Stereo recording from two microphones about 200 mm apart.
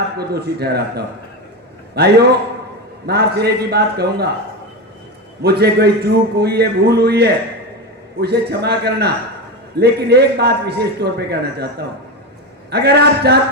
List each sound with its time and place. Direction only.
0.2 s a man's voice: 55° right (ahead or behind)
5.4 s a man's voice: 55° right (ahead or behind)